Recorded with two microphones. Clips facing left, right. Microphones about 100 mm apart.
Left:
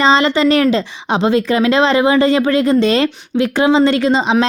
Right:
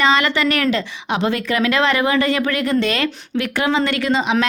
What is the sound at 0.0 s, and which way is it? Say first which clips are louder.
A woman's voice: left 5 dB; 25° left (ahead or behind).